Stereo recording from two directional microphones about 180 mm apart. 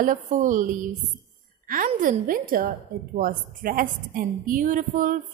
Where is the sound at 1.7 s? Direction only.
50° right (ahead or behind).